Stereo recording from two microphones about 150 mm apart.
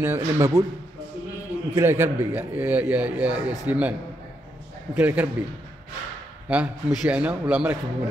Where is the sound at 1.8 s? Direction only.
15° right (ahead or behind).